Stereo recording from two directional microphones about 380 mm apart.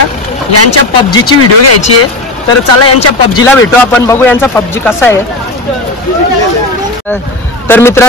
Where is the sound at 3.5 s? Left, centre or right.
Centre.